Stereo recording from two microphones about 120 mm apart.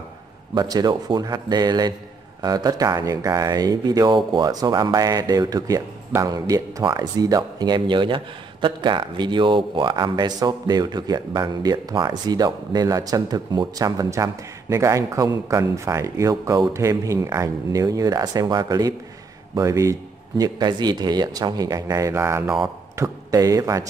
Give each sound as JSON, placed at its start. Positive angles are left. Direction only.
{"t": 0.6, "sound": "speech", "side_deg": -35}